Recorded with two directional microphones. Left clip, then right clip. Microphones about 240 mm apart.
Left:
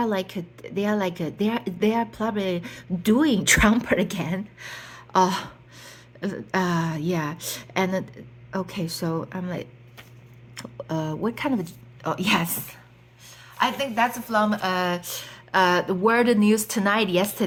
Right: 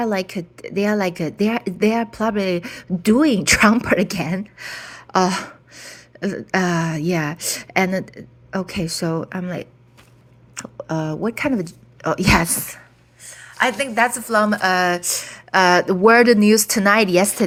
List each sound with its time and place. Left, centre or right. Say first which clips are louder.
0.0 s a woman's voice: right 4 dB; centre